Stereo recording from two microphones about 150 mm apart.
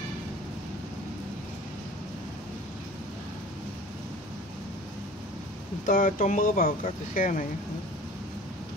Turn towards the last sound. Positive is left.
turn(degrees=60)  # may be behind; listen again after turning